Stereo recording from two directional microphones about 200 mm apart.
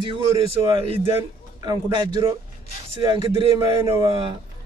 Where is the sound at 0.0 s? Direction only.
25° right (ahead or behind).